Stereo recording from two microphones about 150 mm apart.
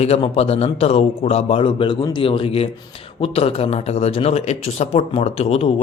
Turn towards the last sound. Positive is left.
turn(degrees=40)  # may be behind; listen again after turning